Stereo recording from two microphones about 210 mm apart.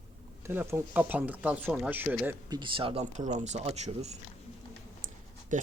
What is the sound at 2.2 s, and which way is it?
Speech, 20° right (ahead or behind).